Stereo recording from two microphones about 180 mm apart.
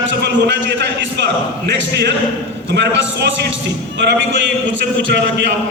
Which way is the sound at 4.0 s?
85° right.